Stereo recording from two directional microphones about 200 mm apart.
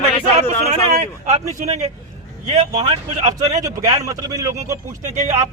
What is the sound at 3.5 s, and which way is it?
A man's voice, 20° right (ahead or behind).